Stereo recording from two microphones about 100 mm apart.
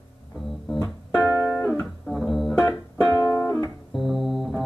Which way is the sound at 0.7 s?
15° left (ahead or behind).